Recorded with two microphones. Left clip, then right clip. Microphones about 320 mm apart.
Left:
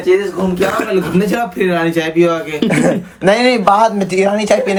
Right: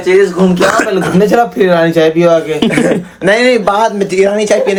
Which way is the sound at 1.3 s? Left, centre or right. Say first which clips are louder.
Right 7 dB; centre.